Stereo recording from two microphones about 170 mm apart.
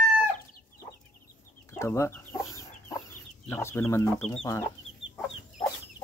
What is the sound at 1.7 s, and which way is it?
Chicken, 15° left (ahead or behind).